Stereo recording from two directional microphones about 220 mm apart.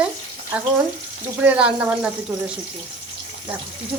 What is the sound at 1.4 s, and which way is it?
Speech, 5° right (ahead or behind).